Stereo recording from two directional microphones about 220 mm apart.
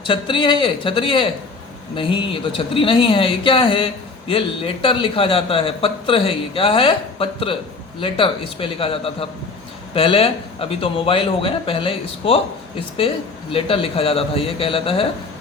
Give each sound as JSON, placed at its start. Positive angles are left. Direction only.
{"t": 0.0, "sound": "a man's voice", "side_deg": 25}
{"t": 13.5, "sound": "a man's voice", "side_deg": 25}